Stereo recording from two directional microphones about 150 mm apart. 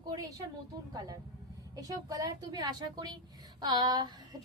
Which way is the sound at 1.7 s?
25° right (ahead or behind).